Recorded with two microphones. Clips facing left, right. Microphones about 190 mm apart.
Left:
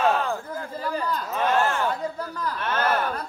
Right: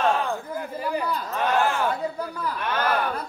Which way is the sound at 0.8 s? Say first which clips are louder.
Right 1 dB; 15° right (ahead or behind).